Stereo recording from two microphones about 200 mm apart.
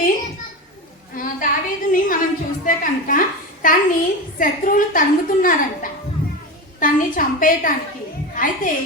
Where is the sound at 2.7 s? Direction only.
40° left (ahead or behind).